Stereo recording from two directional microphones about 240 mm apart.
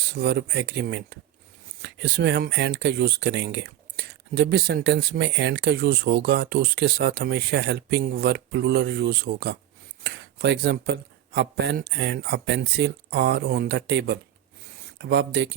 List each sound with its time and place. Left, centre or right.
0.1 s speech: right